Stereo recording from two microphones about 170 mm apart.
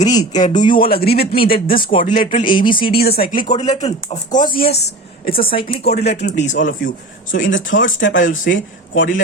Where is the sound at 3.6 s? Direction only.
40° left (ahead or behind).